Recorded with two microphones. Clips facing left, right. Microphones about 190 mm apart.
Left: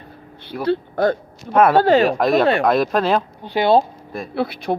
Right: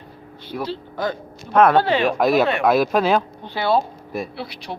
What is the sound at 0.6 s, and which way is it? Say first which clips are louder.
Speech: left 8 dB; 60° left (ahead or behind).